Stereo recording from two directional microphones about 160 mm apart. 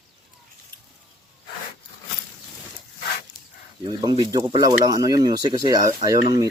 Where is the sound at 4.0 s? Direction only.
30° right (ahead or behind).